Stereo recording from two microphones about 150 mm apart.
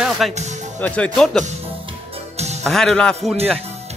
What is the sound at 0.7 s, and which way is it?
Speech, 10° left (ahead or behind).